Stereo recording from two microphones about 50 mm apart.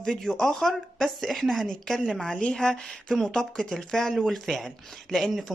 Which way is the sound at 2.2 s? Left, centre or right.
Centre.